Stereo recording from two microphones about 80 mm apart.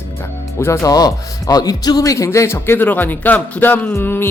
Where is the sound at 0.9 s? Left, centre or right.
Left.